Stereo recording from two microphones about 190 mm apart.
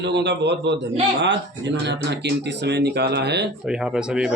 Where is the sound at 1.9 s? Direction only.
65° right (ahead or behind).